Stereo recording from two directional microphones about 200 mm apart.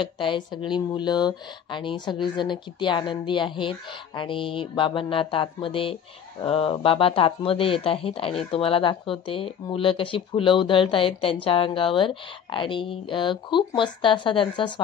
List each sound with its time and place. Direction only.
0.0 s speech: 25° left (ahead or behind)